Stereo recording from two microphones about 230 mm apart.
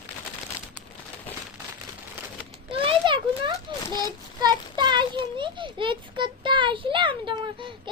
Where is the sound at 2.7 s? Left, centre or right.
Right.